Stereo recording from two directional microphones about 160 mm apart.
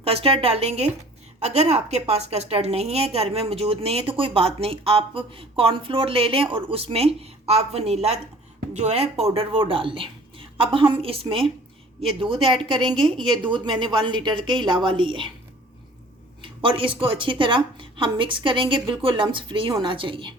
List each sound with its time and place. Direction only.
0.0 s a woman's voice: 35° right (ahead or behind)
16.4 s a woman's voice: 30° right (ahead or behind)